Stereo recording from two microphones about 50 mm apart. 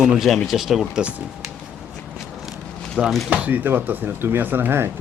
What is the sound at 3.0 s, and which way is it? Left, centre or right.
Speech, right.